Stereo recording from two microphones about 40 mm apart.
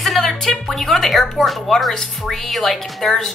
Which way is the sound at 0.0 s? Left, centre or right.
Centre.